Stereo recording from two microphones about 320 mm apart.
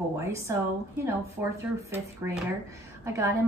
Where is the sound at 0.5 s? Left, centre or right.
Centre.